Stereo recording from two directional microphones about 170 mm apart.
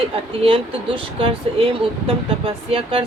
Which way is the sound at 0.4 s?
30° right (ahead or behind).